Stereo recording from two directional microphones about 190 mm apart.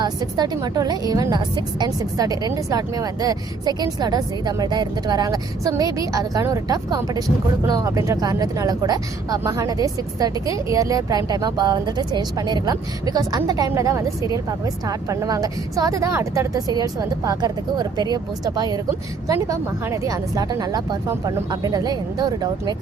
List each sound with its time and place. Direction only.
0.0 s a woman's voice: 20° right (ahead or behind)